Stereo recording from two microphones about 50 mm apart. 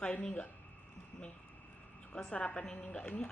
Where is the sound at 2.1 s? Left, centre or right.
Left.